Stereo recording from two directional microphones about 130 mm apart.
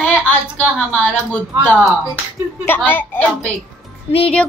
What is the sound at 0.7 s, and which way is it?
Speech, 15° left (ahead or behind).